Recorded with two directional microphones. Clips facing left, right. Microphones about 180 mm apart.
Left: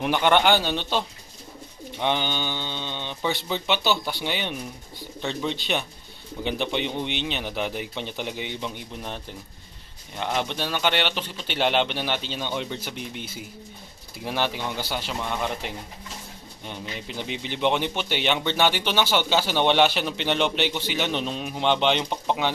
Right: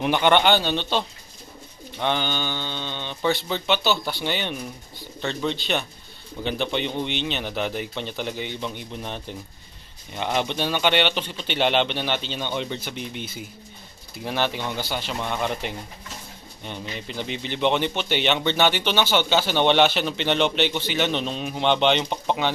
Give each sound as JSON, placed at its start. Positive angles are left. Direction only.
{"t": 0.0, "sound": "a man's voice", "side_deg": 5}
{"t": 10.2, "sound": "a man's voice", "side_deg": 0}